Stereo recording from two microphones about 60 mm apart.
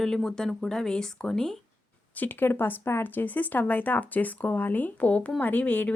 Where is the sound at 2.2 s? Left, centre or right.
Left.